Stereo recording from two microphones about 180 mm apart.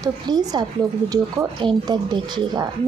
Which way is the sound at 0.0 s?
20° right (ahead or behind).